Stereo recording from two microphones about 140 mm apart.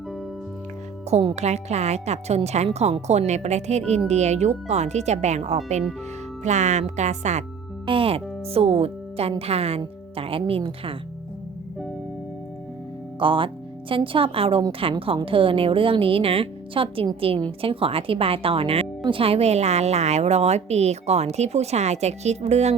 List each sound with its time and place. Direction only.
1.1 s speech: 50° right (ahead or behind)
7.9 s speech: 40° right (ahead or behind)
13.1 s a woman's voice: 35° right (ahead or behind)